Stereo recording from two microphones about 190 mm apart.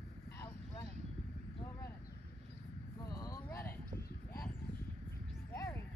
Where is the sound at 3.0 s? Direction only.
15° left (ahead or behind).